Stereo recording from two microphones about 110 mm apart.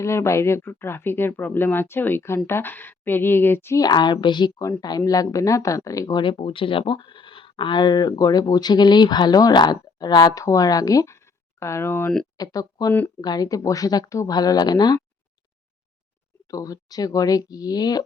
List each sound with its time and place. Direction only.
0.0 s speech: 25° left (ahead or behind)
3.8 s speech: 40° left (ahead or behind)
6.1 s speech: 50° left (ahead or behind); by 12.1 s 20° left (ahead or behind)
12.4 s speech: 35° left (ahead or behind)
16.5 s speech: 35° left (ahead or behind)